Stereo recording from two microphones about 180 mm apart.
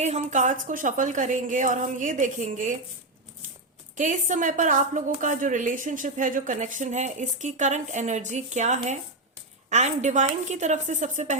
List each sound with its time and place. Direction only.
0.0 s a woman's voice: 40° right (ahead or behind)
3.9 s a woman's voice: 45° right (ahead or behind)